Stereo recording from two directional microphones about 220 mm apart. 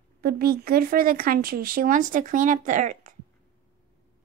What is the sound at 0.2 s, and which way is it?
Speech, 45° right (ahead or behind).